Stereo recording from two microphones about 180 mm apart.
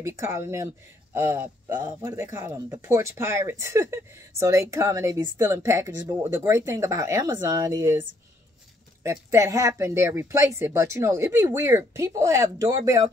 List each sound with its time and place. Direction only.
0.0 s speech: 15° right (ahead or behind)